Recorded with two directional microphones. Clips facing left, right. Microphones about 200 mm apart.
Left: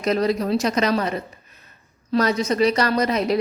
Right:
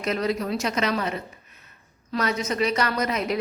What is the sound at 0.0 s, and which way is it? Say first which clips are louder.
A woman's voice: left 5 dB; 35° left (ahead or behind).